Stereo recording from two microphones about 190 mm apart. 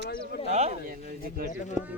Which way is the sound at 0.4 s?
35° right (ahead or behind).